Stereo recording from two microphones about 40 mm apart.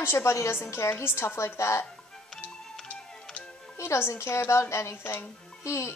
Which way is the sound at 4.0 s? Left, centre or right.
Left.